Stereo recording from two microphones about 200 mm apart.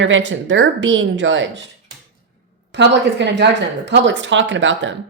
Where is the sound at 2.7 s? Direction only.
60° right (ahead or behind).